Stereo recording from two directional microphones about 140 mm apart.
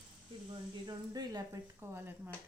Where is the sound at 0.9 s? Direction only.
25° right (ahead or behind).